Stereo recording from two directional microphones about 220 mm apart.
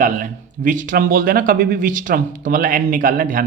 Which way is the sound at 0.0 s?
35° right (ahead or behind).